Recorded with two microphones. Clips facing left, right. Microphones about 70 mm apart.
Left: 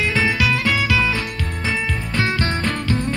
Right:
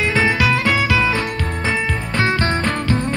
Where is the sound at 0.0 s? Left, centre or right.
Right.